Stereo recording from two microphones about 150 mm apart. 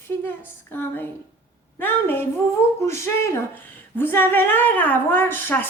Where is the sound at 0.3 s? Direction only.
15° left (ahead or behind).